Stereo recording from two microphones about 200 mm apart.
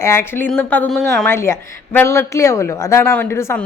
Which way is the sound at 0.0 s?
10° left (ahead or behind).